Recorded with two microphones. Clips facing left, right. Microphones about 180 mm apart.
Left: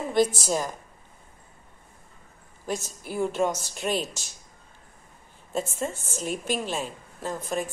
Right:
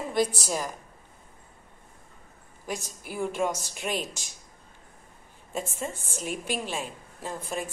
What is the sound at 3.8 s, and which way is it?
Speech, 35° left (ahead or behind).